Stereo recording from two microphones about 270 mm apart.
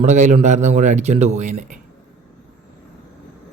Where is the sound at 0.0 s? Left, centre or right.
Right.